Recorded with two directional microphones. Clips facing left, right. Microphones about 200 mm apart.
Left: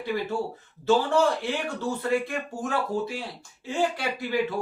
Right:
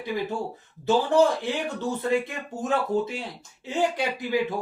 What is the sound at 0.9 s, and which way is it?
Speech, 15° right (ahead or behind).